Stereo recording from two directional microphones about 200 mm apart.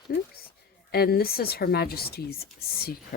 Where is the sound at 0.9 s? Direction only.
50° left (ahead or behind).